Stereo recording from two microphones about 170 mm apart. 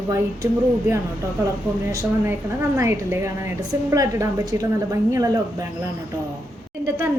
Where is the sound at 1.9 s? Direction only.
20° right (ahead or behind).